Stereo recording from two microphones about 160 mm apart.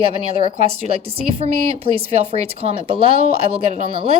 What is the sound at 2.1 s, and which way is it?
Speech, 40° right (ahead or behind).